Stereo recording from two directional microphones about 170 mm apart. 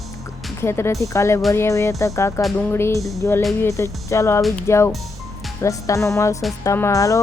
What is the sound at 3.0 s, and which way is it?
Music, centre (ahead or behind).